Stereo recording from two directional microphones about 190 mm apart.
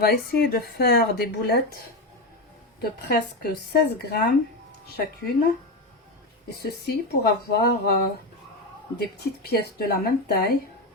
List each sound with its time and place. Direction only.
0.0 s speech: 55° left (ahead or behind)
3.0 s speech: 55° left (ahead or behind)
6.6 s speech: 55° left (ahead or behind)
9.1 s speech: 55° left (ahead or behind)